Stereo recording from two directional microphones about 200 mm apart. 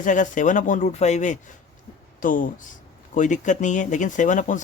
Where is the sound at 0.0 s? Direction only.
40° left (ahead or behind).